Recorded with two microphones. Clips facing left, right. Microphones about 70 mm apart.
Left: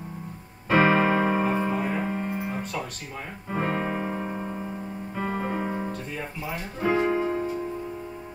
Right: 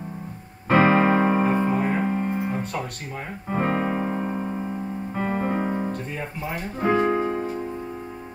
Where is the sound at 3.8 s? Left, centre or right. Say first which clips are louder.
Right 4 dB; centre.